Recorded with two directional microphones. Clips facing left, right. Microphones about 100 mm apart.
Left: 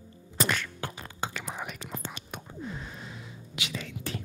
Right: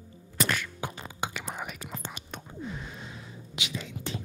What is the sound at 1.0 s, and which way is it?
Whispering, 5° right (ahead or behind).